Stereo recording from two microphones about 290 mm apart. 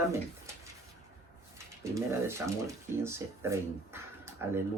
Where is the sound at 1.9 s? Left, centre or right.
Centre.